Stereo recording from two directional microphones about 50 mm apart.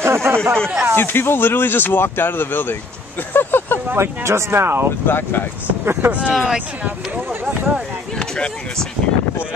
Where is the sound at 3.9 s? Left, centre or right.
Right.